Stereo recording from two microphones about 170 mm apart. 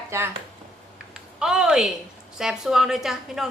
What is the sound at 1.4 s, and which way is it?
Speech, 5° right (ahead or behind).